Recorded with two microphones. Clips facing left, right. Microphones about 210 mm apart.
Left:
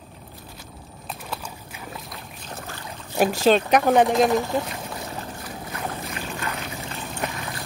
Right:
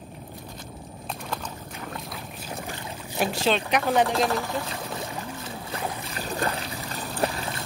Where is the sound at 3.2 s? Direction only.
45° left (ahead or behind).